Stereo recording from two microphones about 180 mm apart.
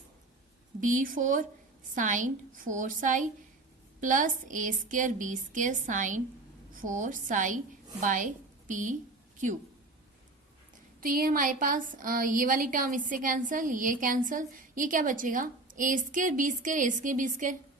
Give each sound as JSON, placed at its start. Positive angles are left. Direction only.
{"t": 0.8, "sound": "a woman's voice", "side_deg": -45}
{"t": 11.0, "sound": "a woman's voice", "side_deg": -50}